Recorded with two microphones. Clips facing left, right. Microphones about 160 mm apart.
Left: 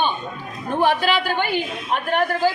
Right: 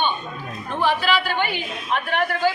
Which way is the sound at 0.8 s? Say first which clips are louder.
Left 2 dB; 50° left (ahead or behind).